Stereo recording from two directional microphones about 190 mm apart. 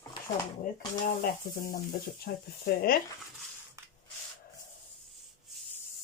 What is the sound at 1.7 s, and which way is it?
Speech, 55° left (ahead or behind).